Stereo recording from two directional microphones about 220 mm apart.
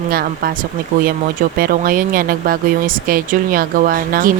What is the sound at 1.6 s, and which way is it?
A woman's voice, 40° right (ahead or behind).